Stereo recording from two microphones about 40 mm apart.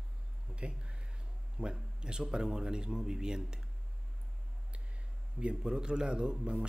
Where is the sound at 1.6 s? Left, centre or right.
Right.